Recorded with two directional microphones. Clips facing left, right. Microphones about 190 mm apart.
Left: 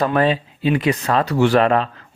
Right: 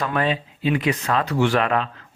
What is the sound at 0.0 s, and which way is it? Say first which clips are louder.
Speech: left 5 dB; 35° left (ahead or behind).